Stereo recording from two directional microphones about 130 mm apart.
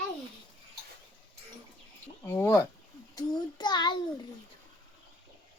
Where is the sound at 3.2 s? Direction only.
35° left (ahead or behind).